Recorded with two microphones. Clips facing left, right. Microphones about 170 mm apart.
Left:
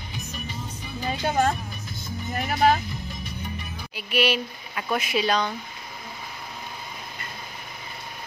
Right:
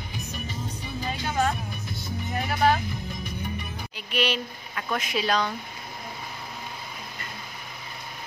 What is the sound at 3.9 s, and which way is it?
Speech, 5° left (ahead or behind).